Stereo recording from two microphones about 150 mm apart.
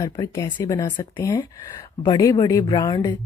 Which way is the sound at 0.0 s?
25° left (ahead or behind).